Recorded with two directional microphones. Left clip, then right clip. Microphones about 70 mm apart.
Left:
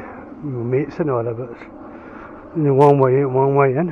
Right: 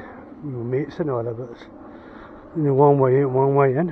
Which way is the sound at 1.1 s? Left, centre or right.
Right.